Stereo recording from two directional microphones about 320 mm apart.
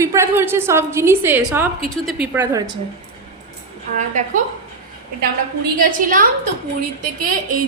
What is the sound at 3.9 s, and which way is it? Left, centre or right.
Speech, right.